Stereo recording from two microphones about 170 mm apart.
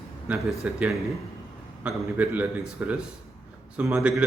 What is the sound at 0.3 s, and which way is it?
A man's voice, 5° right (ahead or behind).